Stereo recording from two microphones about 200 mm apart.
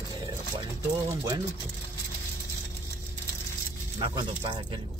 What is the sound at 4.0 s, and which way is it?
Speech, 25° right (ahead or behind).